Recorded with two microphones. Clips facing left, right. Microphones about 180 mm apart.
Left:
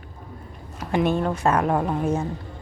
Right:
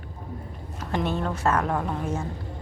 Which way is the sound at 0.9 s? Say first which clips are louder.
Left 5 dB; 15° left (ahead or behind).